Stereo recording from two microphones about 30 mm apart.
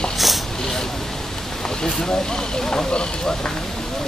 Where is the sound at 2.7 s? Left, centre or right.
Left.